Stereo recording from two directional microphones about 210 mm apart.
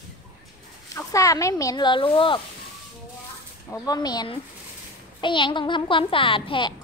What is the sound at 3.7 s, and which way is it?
A child's voice, 15° left (ahead or behind).